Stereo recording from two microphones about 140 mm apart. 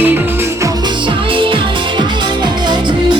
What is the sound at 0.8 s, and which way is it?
Music, 35° right (ahead or behind).